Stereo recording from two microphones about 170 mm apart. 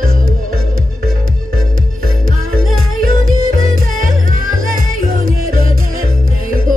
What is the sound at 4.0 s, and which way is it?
Music, 55° right (ahead or behind).